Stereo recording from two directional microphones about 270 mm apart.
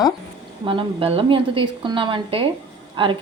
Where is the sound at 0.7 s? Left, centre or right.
Centre.